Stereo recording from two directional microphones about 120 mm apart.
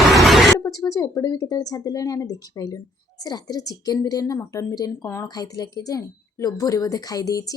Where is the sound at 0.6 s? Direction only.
30° left (ahead or behind).